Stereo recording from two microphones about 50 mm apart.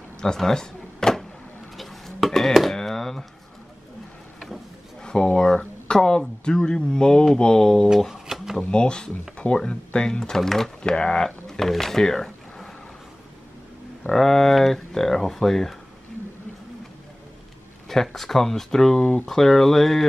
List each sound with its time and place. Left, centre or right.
0.2 s power windows: centre
1.8 s dishes: centre
2.7 s a sound: centre
5.0 s speech: centre
8.1 s a sound: centre
8.5 s speech: centre
10.8 s speech: left
14.1 s speech: centre
17.8 s speech: centre